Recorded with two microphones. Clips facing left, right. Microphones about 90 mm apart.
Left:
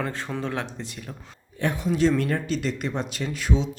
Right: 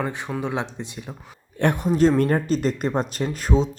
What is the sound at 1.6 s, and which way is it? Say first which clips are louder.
Speech: right 5 dB; 60° right (ahead or behind).